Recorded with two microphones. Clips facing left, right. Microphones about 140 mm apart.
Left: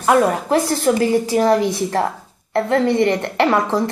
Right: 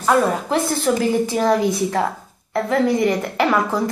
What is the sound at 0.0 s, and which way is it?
A woman's voice, centre (ahead or behind).